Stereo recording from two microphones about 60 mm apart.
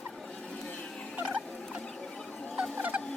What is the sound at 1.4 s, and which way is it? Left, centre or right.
Rodents, left.